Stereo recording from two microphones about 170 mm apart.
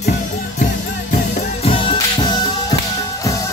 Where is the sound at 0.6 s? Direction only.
45° left (ahead or behind); by 3.5 s 20° left (ahead or behind).